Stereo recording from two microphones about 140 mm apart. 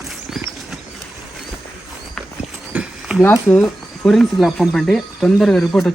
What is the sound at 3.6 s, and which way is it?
Speech, centre (ahead or behind).